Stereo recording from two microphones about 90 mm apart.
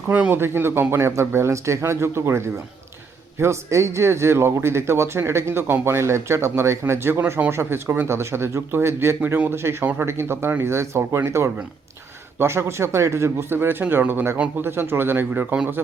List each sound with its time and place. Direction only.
0.1 s speech: 20° right (ahead or behind)